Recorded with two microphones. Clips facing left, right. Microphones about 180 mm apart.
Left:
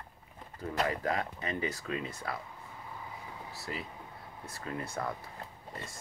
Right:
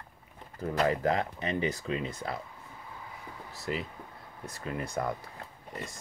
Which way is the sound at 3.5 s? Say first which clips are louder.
Right 7 dB; 20° right (ahead or behind).